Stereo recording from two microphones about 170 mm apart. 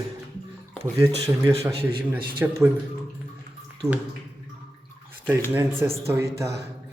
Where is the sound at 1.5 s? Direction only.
35° right (ahead or behind).